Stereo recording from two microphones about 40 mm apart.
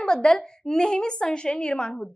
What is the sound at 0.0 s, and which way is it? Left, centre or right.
A woman's voice, centre.